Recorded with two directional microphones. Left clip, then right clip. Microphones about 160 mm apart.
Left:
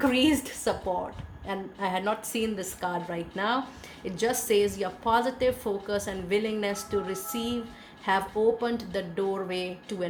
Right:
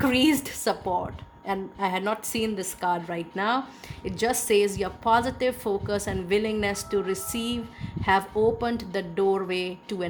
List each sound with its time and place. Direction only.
0.0 s a woman's voice: 50° right (ahead or behind)
8.6 s a woman's voice: 50° right (ahead or behind)